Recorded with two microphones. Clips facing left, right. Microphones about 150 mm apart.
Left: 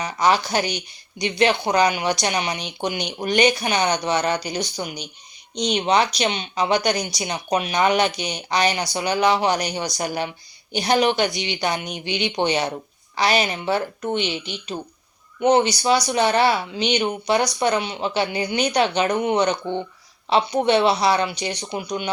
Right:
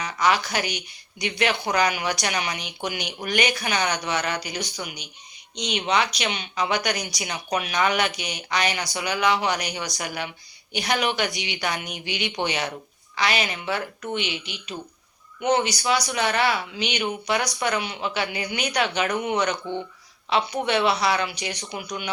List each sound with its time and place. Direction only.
0.0 s speech: 30° left (ahead or behind)